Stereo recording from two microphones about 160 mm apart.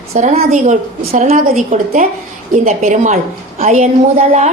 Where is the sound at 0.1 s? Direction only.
50° right (ahead or behind).